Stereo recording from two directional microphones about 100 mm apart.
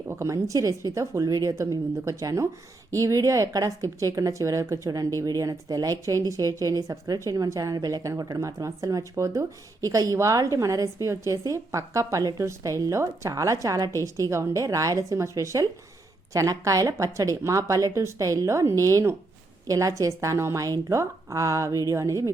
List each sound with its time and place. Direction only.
0.1 s speech: 30° right (ahead or behind)